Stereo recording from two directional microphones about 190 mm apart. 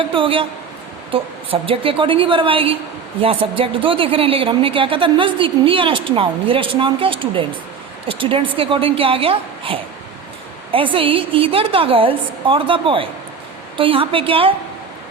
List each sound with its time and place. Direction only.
0.0 s a woman's voice: 25° right (ahead or behind)